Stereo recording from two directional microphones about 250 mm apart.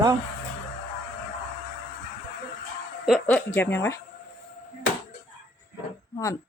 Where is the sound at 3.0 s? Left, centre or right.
Centre.